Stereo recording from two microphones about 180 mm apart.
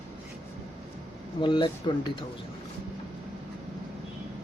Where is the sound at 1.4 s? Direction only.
25° left (ahead or behind).